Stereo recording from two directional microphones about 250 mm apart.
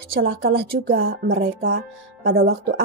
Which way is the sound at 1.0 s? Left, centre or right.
Right.